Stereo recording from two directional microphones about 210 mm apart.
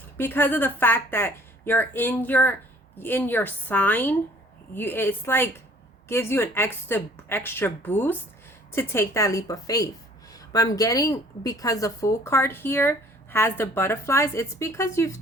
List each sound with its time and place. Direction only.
0.2 s a woman's voice: 10° left (ahead or behind)